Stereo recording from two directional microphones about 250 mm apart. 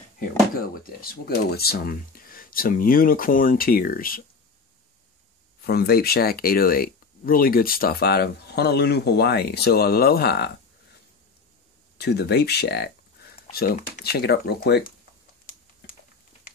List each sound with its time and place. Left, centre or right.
0.2 s speech: left
5.6 s speech: left
12.0 s speech: left